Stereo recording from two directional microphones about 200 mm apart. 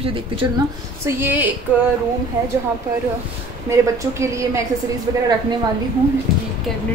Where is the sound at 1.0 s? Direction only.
10° right (ahead or behind).